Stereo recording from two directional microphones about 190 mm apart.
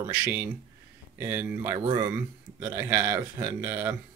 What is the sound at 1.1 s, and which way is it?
Speech, 10° right (ahead or behind).